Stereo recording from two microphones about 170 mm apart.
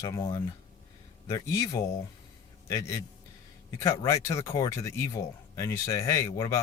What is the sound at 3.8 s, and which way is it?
Speech, 20° left (ahead or behind).